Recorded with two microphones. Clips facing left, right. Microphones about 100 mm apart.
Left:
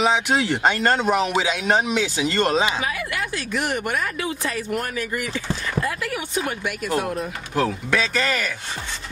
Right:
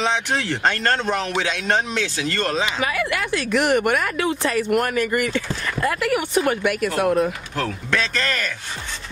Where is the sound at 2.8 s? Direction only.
70° right (ahead or behind).